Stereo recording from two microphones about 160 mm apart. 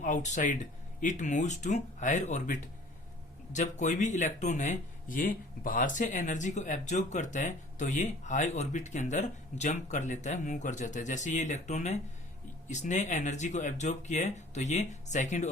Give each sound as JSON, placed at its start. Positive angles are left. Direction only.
{"t": 0.0, "sound": "speech", "side_deg": 50}